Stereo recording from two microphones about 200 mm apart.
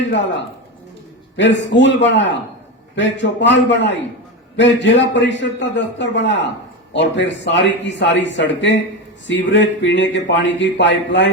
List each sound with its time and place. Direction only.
1.4 s speech: 65° left (ahead or behind)